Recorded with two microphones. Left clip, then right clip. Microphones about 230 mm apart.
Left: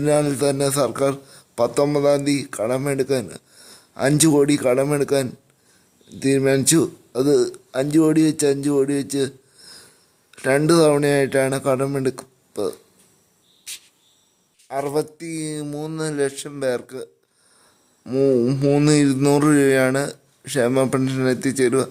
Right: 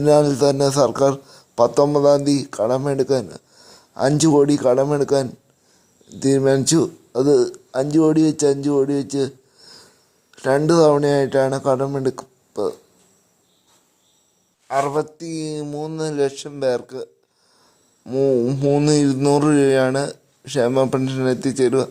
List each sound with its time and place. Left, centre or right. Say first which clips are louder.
0.0 s speech: right 4 dB; centre
3.3 s a sound: even; centre
3.9 s speech: right 1 dB; centre
14.7 s speech: right 3 dB; centre
15.2 s speech: right 2 dB; centre